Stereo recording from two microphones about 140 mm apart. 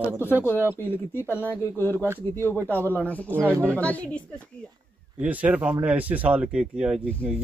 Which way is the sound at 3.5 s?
20° right (ahead or behind).